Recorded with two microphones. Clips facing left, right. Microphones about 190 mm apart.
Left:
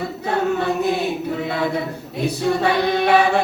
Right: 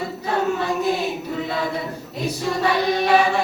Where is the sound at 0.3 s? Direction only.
60° left (ahead or behind).